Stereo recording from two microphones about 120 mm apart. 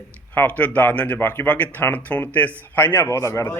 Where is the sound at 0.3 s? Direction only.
15° left (ahead or behind).